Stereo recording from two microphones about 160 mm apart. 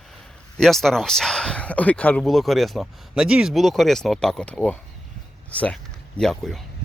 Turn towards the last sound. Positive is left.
turn(degrees=0)  # may be behind; listen again after turning